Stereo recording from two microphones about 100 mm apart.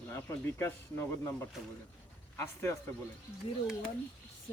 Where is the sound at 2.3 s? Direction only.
25° left (ahead or behind).